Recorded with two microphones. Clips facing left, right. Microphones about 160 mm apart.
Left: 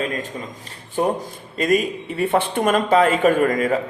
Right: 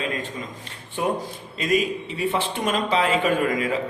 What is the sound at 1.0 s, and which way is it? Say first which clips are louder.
A man's voice: left 4 dB; 40° left (ahead or behind).